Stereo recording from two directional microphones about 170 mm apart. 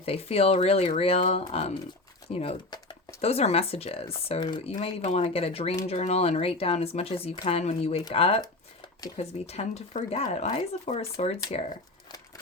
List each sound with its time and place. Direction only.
0.0 s speech: 35° left (ahead or behind)